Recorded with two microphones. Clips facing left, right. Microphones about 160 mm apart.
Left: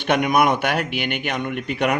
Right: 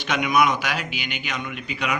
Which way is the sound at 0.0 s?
55° left (ahead or behind).